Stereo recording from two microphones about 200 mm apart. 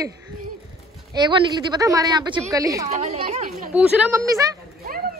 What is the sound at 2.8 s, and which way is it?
Speech, 35° right (ahead or behind).